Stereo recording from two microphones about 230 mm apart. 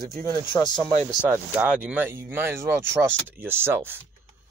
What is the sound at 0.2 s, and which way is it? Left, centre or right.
Speech, centre.